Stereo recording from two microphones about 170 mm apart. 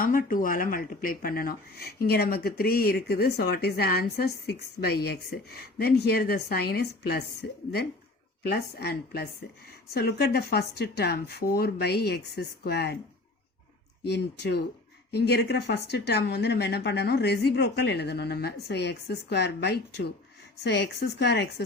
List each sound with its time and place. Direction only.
0.0 s speech: 55° left (ahead or behind)
8.4 s speech: 70° left (ahead or behind)
14.1 s speech: 80° left
20.7 s speech: 90° left